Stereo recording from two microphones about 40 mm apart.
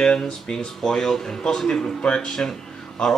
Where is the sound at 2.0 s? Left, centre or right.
Left.